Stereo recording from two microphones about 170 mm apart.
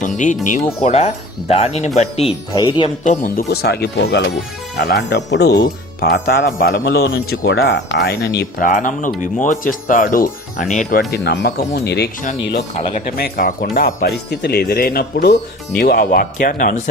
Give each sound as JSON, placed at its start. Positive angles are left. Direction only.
{"t": 0.8, "sound": "speech", "side_deg": 40}
{"t": 2.6, "sound": "speech", "side_deg": 25}
{"t": 3.0, "sound": "speech", "side_deg": 50}
{"t": 5.6, "sound": "speech", "side_deg": 60}
{"t": 8.6, "sound": "speech", "side_deg": 50}
{"t": 10.9, "sound": "speech", "side_deg": 70}
{"t": 12.8, "sound": "speech", "side_deg": 50}